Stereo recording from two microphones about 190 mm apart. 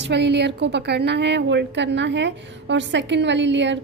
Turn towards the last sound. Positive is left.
turn(degrees=-70)  # may be behind; listen again after turning